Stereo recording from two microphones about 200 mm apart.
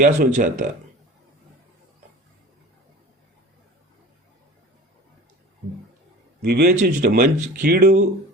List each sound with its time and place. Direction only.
0.1 s speech: 40° right (ahead or behind)
6.4 s speech: 50° right (ahead or behind)